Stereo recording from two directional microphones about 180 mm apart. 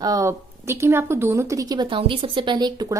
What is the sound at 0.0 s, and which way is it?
Speech, 20° right (ahead or behind).